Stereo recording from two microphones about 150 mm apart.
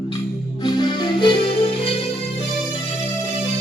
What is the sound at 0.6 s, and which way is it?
Music, 30° left (ahead or behind).